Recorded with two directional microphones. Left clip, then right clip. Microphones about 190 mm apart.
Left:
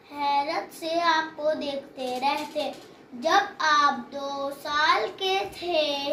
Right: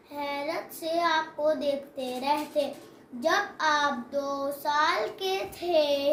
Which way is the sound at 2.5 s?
20° right (ahead or behind).